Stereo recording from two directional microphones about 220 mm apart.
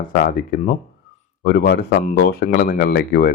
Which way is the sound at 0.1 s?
40° left (ahead or behind).